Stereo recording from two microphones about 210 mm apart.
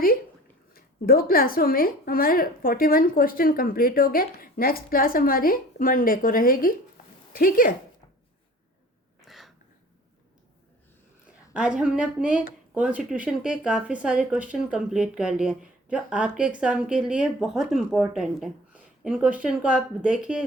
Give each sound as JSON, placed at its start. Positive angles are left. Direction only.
{"t": 0.7, "sound": "a woman's voice", "side_deg": 45}
{"t": 9.2, "sound": "a sound", "side_deg": 0}
{"t": 11.5, "sound": "speech", "side_deg": -5}